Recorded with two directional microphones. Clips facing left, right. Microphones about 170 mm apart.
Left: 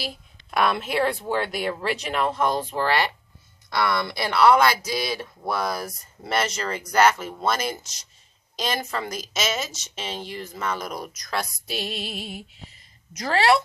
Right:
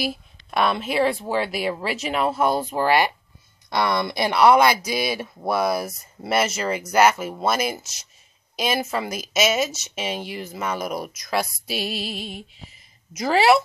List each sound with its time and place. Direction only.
0.0 s speech: 5° right (ahead or behind)
13.1 s speech: 10° right (ahead or behind)